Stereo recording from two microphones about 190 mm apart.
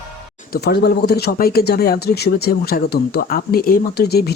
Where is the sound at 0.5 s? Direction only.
60° left (ahead or behind).